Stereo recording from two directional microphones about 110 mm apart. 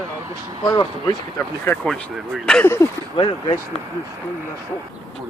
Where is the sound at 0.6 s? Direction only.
40° left (ahead or behind).